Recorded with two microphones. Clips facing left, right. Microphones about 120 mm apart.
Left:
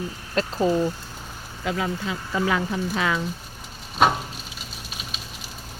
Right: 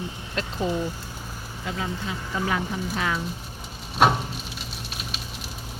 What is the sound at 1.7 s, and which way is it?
Speech, 90° left.